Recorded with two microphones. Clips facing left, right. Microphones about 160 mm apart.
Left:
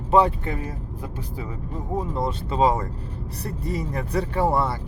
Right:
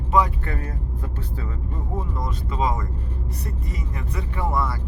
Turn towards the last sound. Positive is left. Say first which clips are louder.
# left 4 dB
turn(degrees=30)  # may be behind; listen again after turning